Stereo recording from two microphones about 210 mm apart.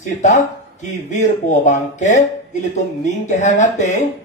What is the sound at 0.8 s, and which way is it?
Speech, 35° left (ahead or behind).